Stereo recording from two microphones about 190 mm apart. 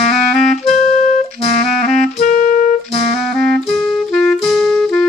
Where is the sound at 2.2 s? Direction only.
45° left (ahead or behind).